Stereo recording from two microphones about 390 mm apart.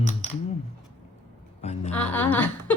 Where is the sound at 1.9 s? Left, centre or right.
Centre.